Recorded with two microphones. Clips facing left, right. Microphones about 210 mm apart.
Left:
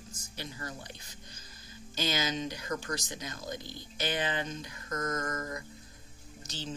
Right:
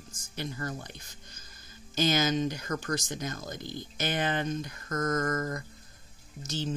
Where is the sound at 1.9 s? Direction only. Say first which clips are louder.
Right 6 dB; 45° right (ahead or behind).